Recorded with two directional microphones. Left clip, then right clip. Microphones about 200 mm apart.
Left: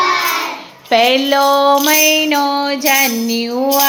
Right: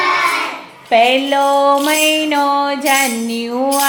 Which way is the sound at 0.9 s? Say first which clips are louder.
Even; 25° left (ahead or behind).